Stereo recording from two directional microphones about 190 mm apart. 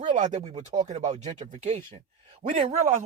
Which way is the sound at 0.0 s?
40° right (ahead or behind).